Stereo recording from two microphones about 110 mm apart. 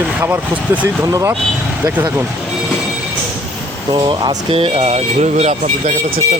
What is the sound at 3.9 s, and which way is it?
Speech, 45° right (ahead or behind).